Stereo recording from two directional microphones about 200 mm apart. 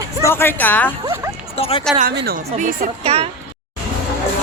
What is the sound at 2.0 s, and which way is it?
Speech, 50° right (ahead or behind).